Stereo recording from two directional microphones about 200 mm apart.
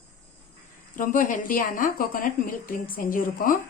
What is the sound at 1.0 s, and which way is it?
Speech, 40° left (ahead or behind).